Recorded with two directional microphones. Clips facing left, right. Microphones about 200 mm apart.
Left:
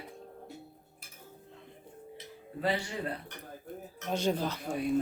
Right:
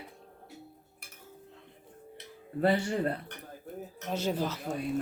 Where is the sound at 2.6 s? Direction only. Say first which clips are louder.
Right 5 dB; 45° right (ahead or behind).